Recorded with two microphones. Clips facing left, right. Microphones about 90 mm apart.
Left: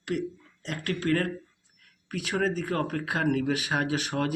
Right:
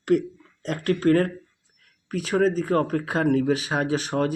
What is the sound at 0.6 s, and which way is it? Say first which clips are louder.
Speech: right 7 dB; 40° right (ahead or behind).